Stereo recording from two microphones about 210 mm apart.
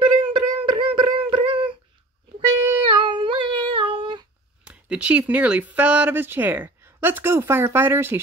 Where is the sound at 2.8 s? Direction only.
25° right (ahead or behind).